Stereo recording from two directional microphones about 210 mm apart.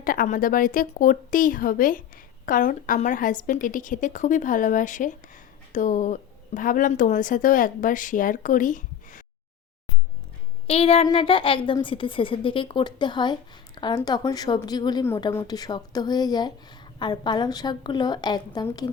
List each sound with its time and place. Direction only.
0.0 s speech: 40° left (ahead or behind)
10.7 s a woman's voice: 30° left (ahead or behind)